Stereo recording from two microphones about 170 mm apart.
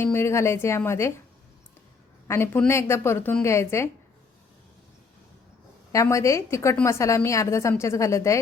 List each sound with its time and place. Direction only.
0.0 s a woman's voice: 15° left (ahead or behind)
2.2 s a woman's voice: 15° left (ahead or behind)
5.9 s a woman's voice: 20° left (ahead or behind)